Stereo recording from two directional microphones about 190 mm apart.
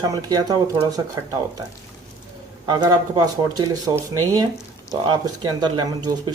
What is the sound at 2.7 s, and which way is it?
Speech, 20° right (ahead or behind).